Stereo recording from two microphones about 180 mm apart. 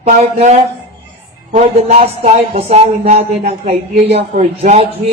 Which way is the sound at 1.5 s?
35° right (ahead or behind).